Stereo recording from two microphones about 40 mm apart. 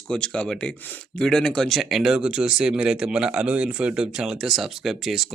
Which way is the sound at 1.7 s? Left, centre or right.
Centre.